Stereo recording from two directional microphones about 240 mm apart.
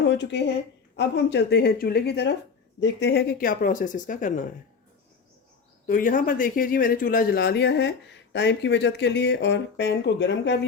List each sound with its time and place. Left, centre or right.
0.1 s a woman's voice: left
5.9 s speech: left